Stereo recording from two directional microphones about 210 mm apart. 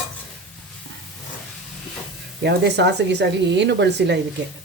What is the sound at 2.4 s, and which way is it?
Speech, 55° right (ahead or behind).